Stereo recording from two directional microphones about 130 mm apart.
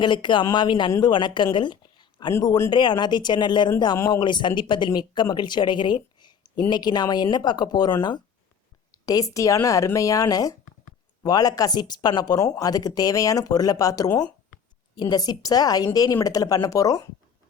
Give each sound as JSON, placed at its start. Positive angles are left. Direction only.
{"t": 0.0, "sound": "speech", "side_deg": 35}
{"t": 1.5, "sound": "a sound", "side_deg": 35}
{"t": 2.6, "sound": "speech", "side_deg": 35}
{"t": 3.9, "sound": "speech", "side_deg": 20}
{"t": 4.2, "sound": "speech", "side_deg": 35}